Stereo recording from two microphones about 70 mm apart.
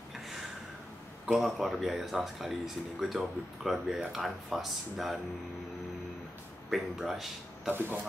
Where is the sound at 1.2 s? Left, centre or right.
Centre.